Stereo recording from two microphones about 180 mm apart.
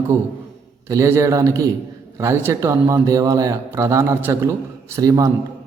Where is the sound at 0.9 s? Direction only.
15° right (ahead or behind).